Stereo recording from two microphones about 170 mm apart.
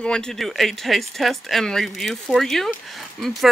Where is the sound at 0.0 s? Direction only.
5° left (ahead or behind).